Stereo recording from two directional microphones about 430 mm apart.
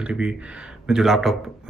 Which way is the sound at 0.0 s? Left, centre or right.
Centre.